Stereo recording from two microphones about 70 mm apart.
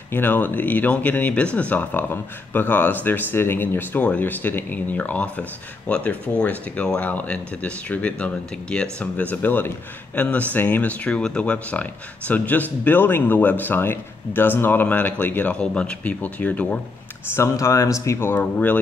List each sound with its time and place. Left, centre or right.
0.1 s speech: left
17.4 s speech: left
18.4 s speech: left